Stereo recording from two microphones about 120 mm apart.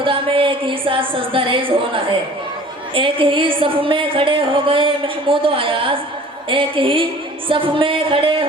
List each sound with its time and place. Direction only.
0.0 s a woman's voice: 45° right (ahead or behind)